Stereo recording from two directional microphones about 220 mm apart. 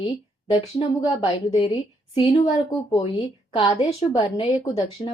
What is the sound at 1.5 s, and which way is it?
A woman's voice, 20° left (ahead or behind).